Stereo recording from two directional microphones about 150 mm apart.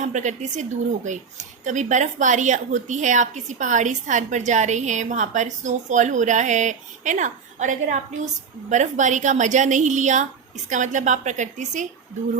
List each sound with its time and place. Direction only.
0.0 s a woman's voice: 55° right (ahead or behind)